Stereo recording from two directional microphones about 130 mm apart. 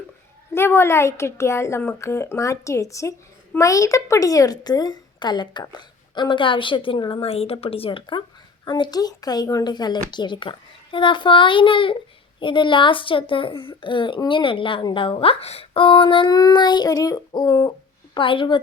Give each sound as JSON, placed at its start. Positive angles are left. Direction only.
{"t": 0.5, "sound": "speech", "side_deg": 20}
{"t": 18.2, "sound": "speech", "side_deg": 40}